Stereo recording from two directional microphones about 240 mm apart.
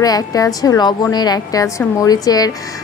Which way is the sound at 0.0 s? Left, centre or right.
Centre.